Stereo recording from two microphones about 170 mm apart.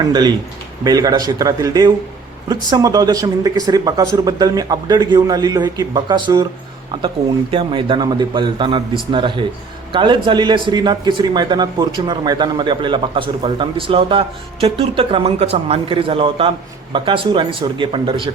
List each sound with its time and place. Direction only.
0.0 s a man's voice: 25° right (ahead or behind)
7.5 s a man's voice: 30° right (ahead or behind)